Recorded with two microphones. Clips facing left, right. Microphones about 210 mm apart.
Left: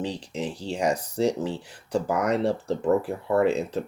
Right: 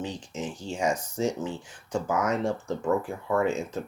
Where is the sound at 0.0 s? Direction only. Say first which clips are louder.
Left 3 dB; 35° left (ahead or behind).